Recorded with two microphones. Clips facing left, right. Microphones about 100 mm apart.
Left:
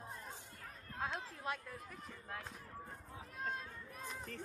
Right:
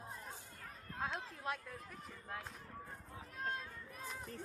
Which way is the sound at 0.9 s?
Centre (ahead or behind).